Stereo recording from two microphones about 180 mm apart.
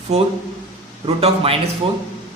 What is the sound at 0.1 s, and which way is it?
Speech, 35° right (ahead or behind).